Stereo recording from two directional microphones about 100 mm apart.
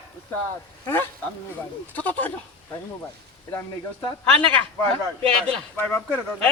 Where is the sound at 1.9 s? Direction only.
15° left (ahead or behind).